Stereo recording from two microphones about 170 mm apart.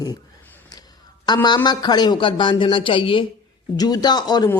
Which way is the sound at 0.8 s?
25° left (ahead or behind).